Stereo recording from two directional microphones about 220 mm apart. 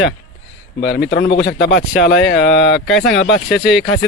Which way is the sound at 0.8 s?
50° left (ahead or behind).